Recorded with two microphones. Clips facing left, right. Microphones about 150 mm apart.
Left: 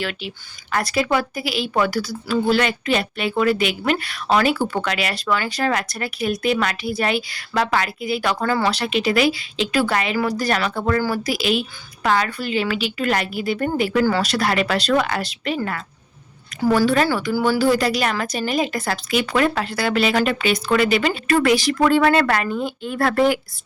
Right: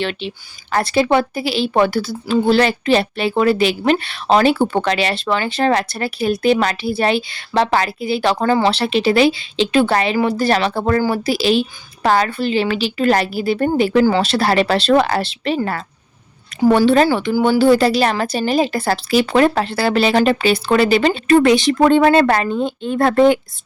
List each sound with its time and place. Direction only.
0.0 s a woman's voice: 25° right (ahead or behind)